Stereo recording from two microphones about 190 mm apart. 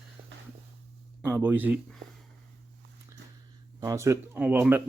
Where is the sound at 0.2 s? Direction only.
30° right (ahead or behind).